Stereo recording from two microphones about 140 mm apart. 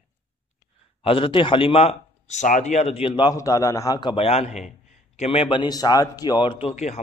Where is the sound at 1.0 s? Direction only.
40° left (ahead or behind).